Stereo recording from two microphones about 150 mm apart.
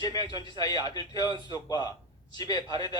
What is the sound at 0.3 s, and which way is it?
A man's voice, 25° left (ahead or behind).